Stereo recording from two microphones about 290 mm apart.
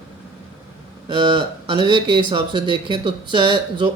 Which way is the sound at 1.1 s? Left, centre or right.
Centre.